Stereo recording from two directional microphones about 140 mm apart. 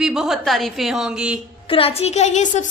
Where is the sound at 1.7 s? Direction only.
45° left (ahead or behind).